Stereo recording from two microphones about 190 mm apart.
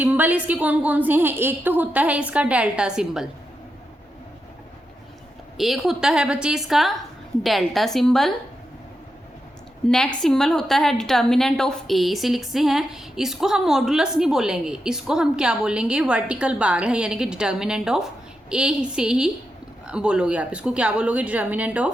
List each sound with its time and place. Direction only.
0.0 s a woman's voice: 10° right (ahead or behind)
5.5 s a woman's voice: centre (ahead or behind)
9.8 s a woman's voice: 5° left (ahead or behind)